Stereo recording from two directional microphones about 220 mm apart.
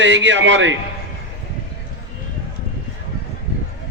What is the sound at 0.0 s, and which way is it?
Speech, 55° right (ahead or behind).